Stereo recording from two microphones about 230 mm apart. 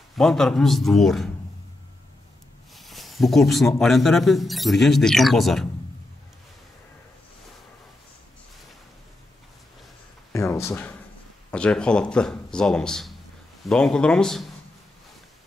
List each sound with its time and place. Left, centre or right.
0.1 s a man's voice: centre
2.7 s a man's voice: centre
10.3 s a sound: centre
11.5 s a man's voice: centre